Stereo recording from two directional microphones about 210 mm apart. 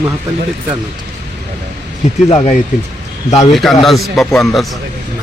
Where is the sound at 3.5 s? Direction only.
Centre (ahead or behind).